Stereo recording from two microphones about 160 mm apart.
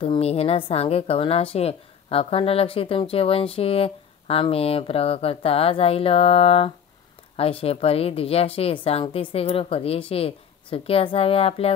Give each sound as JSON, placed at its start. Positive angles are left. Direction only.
{"t": 0.0, "sound": "a woman's voice", "side_deg": 35}